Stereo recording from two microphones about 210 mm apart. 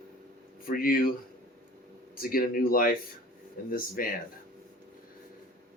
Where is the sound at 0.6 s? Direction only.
45° left (ahead or behind).